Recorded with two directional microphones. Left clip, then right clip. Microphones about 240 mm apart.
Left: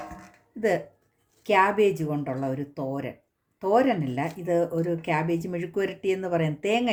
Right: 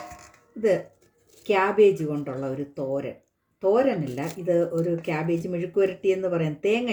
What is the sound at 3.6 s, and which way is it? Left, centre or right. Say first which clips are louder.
Speech: right 1 dB; left.